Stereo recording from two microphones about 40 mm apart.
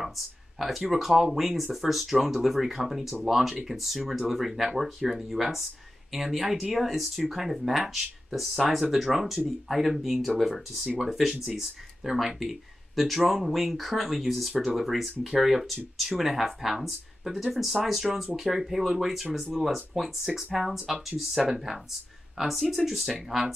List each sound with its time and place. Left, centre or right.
0.6 s speech: centre